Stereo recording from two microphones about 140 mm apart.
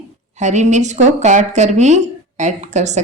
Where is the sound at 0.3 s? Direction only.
60° right (ahead or behind).